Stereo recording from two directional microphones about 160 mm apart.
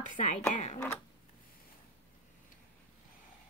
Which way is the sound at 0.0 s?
55° left (ahead or behind).